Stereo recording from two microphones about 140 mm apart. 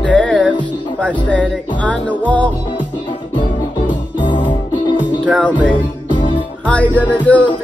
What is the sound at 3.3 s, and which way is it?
Music, 35° left (ahead or behind).